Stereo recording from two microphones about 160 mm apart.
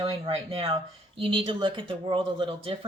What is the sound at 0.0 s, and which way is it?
Speech, 35° right (ahead or behind).